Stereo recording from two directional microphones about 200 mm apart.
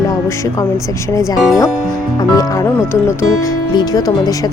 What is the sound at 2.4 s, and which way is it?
Speech, 15° left (ahead or behind).